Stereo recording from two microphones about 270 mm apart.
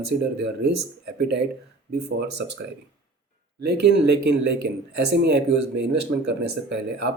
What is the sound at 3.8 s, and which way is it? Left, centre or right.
Speech, right.